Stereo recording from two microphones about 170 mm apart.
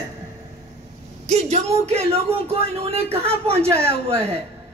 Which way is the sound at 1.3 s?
40° right (ahead or behind).